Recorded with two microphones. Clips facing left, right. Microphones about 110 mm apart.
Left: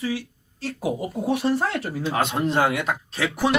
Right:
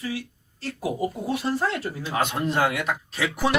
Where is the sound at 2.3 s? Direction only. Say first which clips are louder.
Left 3 dB; 25° left (ahead or behind).